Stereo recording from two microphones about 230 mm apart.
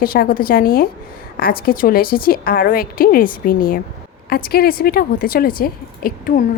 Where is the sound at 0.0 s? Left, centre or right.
Left.